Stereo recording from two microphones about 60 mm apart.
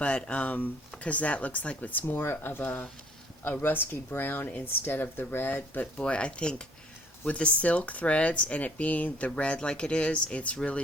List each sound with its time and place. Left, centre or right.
0.0 s speech: centre
6.0 s speech: centre